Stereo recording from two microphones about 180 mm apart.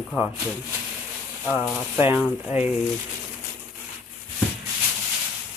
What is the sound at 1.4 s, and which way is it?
Speech, 10° right (ahead or behind).